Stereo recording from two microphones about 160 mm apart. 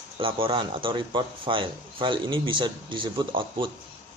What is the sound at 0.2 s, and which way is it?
A man's voice, 35° right (ahead or behind).